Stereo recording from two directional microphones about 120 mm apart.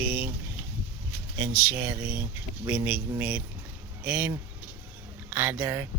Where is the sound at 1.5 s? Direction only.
15° right (ahead or behind).